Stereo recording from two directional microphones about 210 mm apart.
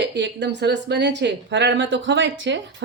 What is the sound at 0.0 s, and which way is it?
Speech, 55° right (ahead or behind).